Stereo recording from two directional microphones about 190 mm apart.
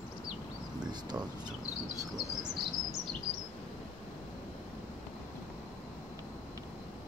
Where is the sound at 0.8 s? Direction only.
20° right (ahead or behind).